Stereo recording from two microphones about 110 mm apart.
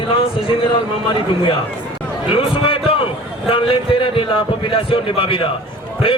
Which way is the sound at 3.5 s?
55° left (ahead or behind).